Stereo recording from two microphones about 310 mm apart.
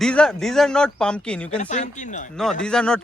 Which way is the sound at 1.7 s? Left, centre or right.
Left.